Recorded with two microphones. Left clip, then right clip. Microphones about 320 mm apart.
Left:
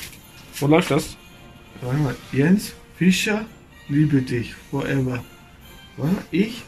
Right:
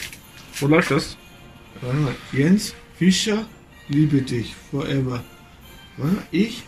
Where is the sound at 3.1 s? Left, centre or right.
Left.